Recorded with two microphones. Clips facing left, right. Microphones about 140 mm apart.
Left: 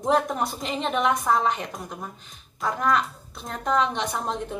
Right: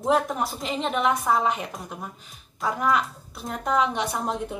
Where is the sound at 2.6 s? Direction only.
5° right (ahead or behind).